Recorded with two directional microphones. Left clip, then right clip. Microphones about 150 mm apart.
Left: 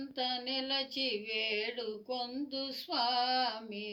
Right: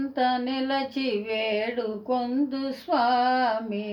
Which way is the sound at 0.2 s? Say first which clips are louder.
Right 10 dB; 45° right (ahead or behind).